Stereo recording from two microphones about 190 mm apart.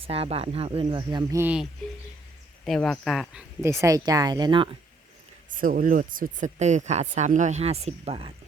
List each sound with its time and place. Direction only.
0.0 s speech: 30° right (ahead or behind)
1.4 s speech: 10° right (ahead or behind)
2.6 s speech: centre (ahead or behind)
3.6 s speech: 15° right (ahead or behind)
5.5 s speech: 45° right (ahead or behind); by 8.3 s 30° right (ahead or behind)